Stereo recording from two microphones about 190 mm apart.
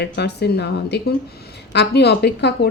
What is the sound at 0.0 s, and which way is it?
A woman's voice, 60° left (ahead or behind).